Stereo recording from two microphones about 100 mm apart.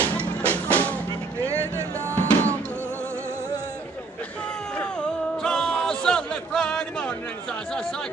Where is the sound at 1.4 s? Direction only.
30° right (ahead or behind).